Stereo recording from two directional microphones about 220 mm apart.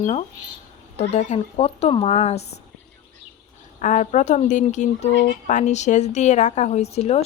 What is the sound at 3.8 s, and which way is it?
A woman's voice, 35° left (ahead or behind).